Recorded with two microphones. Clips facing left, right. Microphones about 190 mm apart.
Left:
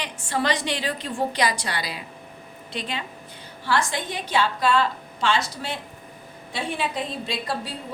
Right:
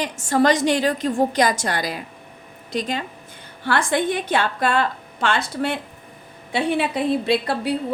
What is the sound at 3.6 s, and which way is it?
A woman's voice, 55° right (ahead or behind).